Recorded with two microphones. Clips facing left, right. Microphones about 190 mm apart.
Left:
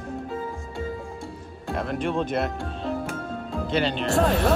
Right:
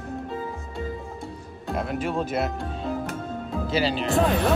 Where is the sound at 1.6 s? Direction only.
5° right (ahead or behind).